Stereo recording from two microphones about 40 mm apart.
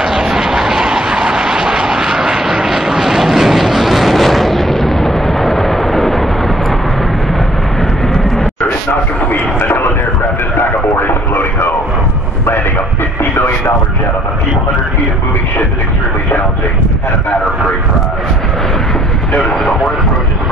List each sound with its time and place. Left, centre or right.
0.0 s vehicle: centre
9.3 s a sound: left
10.6 s radio: left